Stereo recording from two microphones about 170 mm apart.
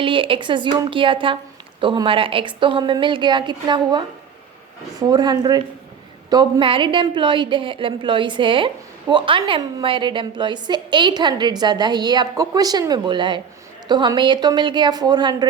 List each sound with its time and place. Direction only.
0.0 s a woman's voice: 30° right (ahead or behind)